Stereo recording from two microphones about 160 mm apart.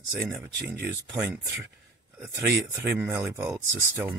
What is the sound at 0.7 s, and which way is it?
Speech, 15° right (ahead or behind).